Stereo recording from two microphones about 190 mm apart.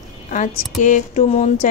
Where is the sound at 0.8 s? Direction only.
40° left (ahead or behind).